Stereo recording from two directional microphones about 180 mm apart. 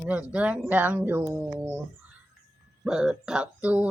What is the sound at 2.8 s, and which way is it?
Child singing, 5° right (ahead or behind).